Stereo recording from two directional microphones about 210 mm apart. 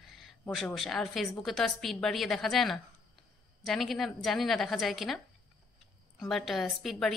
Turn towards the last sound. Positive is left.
turn(degrees=0)  # may be behind; listen again after turning